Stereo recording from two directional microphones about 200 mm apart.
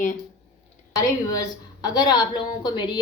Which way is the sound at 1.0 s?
20° left (ahead or behind).